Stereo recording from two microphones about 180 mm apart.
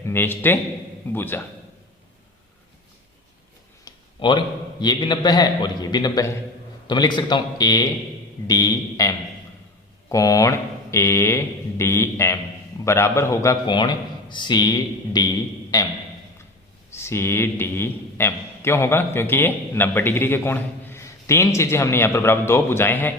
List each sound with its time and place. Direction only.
0.0 s a man's voice: 10° left (ahead or behind)
3.8 s a man's voice: 25° left (ahead or behind)
16.9 s a man's voice: 15° left (ahead or behind)